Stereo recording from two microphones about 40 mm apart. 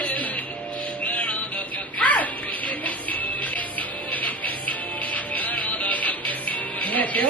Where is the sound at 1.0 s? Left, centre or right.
Left.